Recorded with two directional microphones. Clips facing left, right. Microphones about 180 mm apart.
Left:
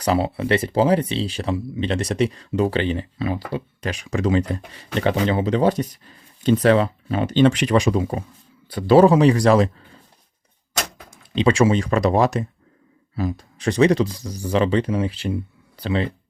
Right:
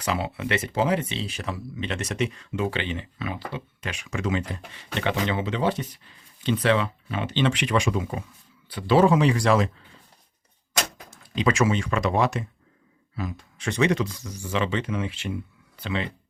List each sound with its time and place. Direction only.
0.0 s speech: 35° left (ahead or behind)
11.3 s speech: 30° left (ahead or behind)